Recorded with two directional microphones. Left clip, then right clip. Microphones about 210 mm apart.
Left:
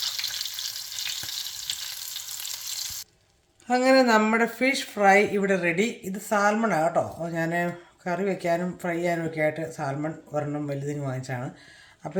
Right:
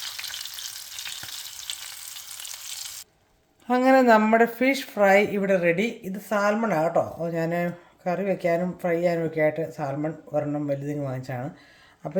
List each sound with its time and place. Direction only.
3.7 s speech: 40° right (ahead or behind)